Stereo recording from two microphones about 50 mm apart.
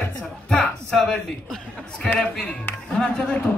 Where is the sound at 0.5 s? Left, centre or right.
Centre.